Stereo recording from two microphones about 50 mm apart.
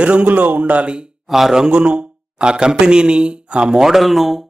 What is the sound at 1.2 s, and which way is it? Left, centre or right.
A man's voice, centre.